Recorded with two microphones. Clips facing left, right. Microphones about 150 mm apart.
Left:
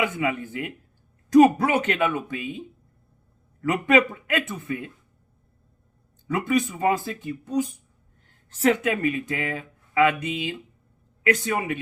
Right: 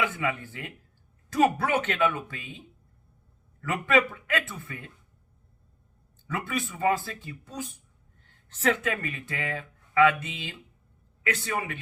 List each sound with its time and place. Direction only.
0.0 s speech: 15° left (ahead or behind)
3.6 s speech: 15° left (ahead or behind)
6.2 s speech: 15° left (ahead or behind)